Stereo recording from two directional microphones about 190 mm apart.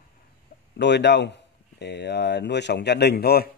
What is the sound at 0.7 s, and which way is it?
Speech, 65° left (ahead or behind).